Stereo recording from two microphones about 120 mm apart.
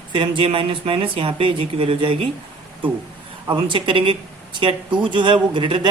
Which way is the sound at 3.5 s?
45° right (ahead or behind).